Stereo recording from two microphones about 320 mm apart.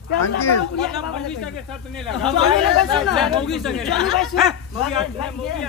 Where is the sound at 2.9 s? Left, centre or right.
Centre.